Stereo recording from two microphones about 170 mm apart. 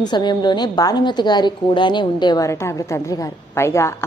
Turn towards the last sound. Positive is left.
turn(degrees=15)  # may be behind; listen again after turning